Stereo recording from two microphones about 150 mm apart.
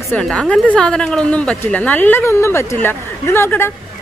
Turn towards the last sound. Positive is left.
turn(degrees=15)  # may be behind; listen again after turning